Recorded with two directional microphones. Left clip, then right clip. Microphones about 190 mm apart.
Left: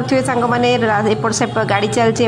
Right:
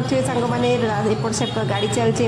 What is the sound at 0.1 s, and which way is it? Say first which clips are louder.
A woman's voice: left 6 dB; 15° left (ahead or behind).